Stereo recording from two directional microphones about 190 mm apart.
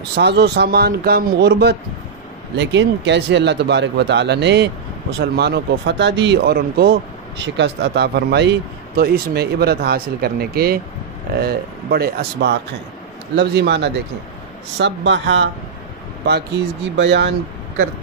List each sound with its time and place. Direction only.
0.1 s speech: 60° right (ahead or behind)
16.9 s speech: 70° right (ahead or behind)